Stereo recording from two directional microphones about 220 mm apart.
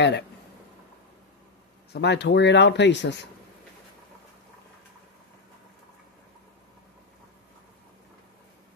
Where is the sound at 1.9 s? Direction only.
50° left (ahead or behind).